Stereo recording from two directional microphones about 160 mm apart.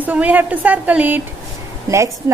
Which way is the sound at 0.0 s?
10° right (ahead or behind).